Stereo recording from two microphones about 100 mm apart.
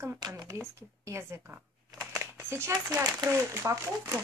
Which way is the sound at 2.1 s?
25° right (ahead or behind).